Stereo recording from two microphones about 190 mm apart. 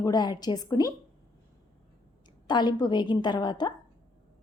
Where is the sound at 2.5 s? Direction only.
25° left (ahead or behind).